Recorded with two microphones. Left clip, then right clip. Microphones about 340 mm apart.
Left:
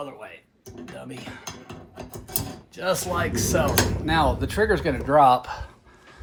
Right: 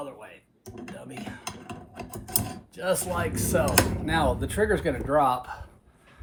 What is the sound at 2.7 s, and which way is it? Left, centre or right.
Speech, left.